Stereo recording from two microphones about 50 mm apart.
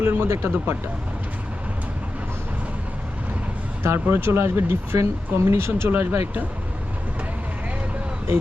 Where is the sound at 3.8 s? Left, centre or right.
Right.